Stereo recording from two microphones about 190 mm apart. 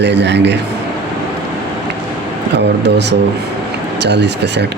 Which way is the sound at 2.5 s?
65° right (ahead or behind).